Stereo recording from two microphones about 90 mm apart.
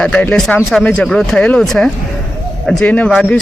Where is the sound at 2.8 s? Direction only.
15° left (ahead or behind).